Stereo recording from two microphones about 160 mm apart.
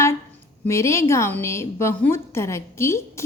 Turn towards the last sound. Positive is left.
turn(degrees=15)  # may be behind; listen again after turning